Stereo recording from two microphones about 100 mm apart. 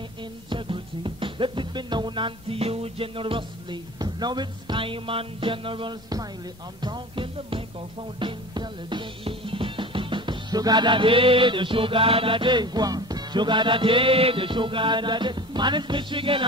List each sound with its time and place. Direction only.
0.2 s music: 55° right (ahead or behind)
6.8 s speech: 45° right (ahead or behind)
7.3 s speech: 65° right (ahead or behind)
8.2 s music: 55° right (ahead or behind)